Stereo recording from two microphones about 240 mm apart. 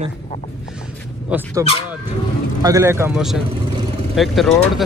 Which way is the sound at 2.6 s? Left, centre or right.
Centre.